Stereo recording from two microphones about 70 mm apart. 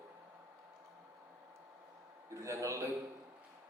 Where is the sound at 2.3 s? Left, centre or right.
Right.